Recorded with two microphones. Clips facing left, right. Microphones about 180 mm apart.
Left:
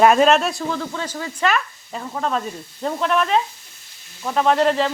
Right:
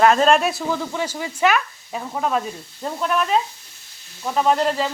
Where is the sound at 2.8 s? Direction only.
5° right (ahead or behind).